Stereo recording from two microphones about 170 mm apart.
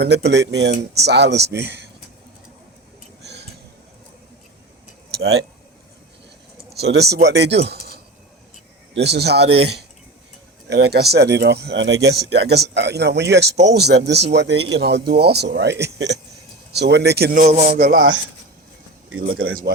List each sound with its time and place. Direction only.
0.0 s speech: 80° right
1.0 s speech: 80° right
6.7 s speech: 75° right (ahead or behind)
7.6 s a sound: 75° right (ahead or behind)
8.9 s speech: 80° right
10.7 s speech: 75° right (ahead or behind)
13.7 s speech: 75° right (ahead or behind)
17.4 s a man's voice: 40° right (ahead or behind)
17.7 s speech: 70° right (ahead or behind)
19.2 s speech: 60° right (ahead or behind)